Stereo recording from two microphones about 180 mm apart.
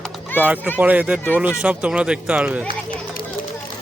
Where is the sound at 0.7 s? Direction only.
10° right (ahead or behind).